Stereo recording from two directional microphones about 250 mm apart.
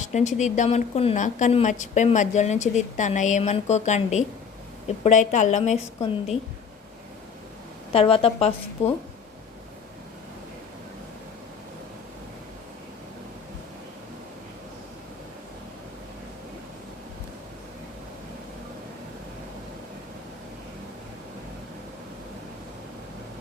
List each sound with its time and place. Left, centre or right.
0.0 s a woman's voice: left
7.9 s a woman's voice: left